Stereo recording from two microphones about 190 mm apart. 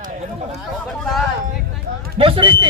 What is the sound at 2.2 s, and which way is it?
Speech, 25° right (ahead or behind).